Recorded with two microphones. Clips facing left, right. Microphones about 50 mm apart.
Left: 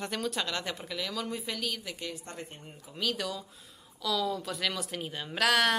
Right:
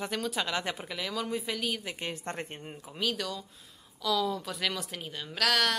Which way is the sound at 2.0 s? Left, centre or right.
Right.